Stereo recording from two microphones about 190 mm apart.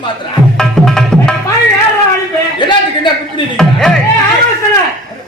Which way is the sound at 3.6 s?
5° left (ahead or behind).